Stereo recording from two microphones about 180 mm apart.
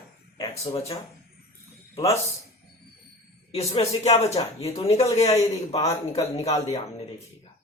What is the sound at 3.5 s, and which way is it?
Speech, 35° left (ahead or behind).